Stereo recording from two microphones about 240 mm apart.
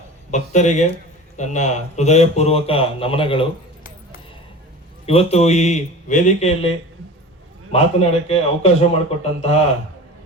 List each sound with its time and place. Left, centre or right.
0.3 s speech: left
5.0 s speech: left